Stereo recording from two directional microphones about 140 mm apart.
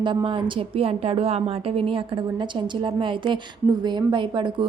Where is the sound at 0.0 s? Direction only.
35° right (ahead or behind).